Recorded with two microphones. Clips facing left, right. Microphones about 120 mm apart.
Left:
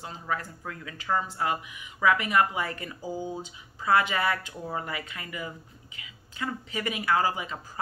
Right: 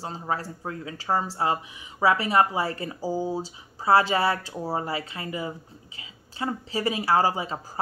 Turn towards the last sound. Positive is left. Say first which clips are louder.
# right 5 dB
turn(degrees=-30)  # may be behind; listen again after turning